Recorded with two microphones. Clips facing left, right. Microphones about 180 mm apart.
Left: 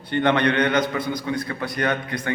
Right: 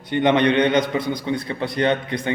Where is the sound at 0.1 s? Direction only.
20° right (ahead or behind).